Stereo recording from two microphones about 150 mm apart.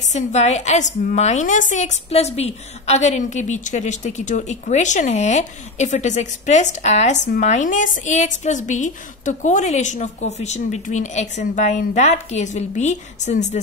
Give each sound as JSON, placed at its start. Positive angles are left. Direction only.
{"t": 0.1, "sound": "a woman's voice", "side_deg": 50}